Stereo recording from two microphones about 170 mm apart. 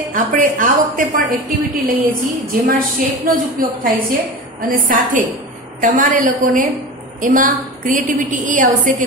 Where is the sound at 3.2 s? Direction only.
55° right (ahead or behind).